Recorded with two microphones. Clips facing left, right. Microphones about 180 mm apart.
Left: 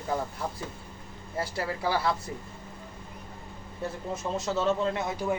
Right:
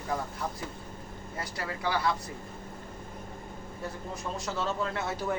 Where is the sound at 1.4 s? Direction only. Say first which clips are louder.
Left 4 dB; 30° left (ahead or behind).